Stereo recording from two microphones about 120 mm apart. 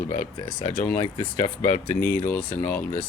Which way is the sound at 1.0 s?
20° left (ahead or behind).